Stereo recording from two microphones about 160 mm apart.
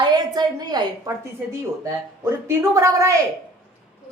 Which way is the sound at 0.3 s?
25° right (ahead or behind).